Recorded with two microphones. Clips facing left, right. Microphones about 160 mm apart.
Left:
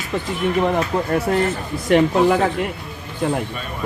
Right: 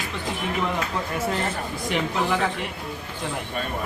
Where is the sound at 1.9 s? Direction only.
45° left (ahead or behind).